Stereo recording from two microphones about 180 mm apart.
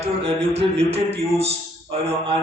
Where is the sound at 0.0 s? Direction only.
35° right (ahead or behind).